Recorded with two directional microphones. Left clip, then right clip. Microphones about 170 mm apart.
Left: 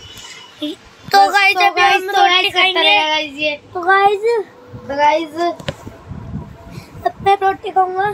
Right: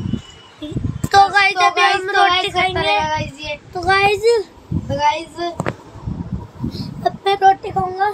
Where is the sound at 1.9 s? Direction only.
5° right (ahead or behind).